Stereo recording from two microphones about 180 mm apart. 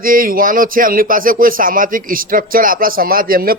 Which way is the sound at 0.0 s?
50° right (ahead or behind).